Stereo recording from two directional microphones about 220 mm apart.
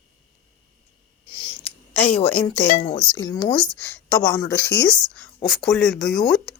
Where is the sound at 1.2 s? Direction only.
20° left (ahead or behind).